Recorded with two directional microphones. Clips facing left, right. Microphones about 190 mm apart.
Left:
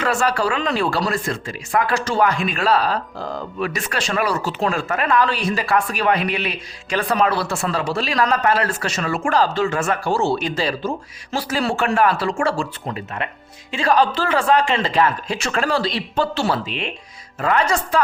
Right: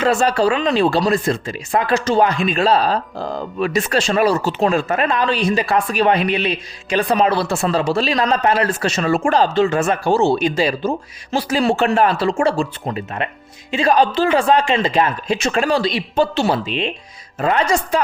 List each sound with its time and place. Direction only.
0.0 s speech: 25° right (ahead or behind)